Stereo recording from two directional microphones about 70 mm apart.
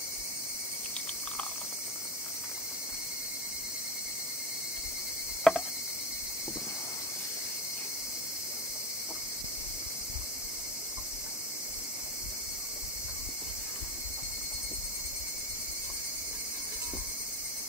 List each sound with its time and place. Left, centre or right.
5.5 s cricket: centre